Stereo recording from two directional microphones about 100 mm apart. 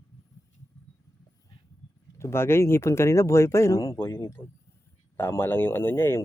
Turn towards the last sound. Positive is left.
turn(degrees=25)  # may be behind; listen again after turning